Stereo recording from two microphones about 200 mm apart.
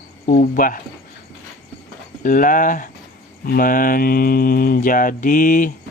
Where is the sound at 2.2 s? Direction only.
40° left (ahead or behind).